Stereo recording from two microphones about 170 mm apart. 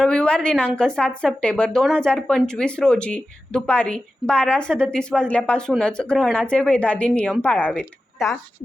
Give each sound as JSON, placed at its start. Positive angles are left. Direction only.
{"t": 0.0, "sound": "a woman's voice", "side_deg": 5}